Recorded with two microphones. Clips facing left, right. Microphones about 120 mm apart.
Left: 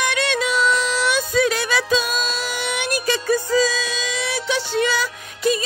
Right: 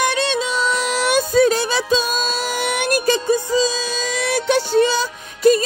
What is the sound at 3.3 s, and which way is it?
Music, 20° right (ahead or behind).